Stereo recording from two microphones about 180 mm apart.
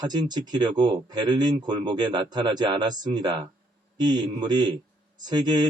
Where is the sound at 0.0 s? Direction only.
25° right (ahead or behind).